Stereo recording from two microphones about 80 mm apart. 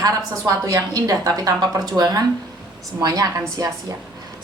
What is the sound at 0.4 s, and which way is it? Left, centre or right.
A woman's voice, right.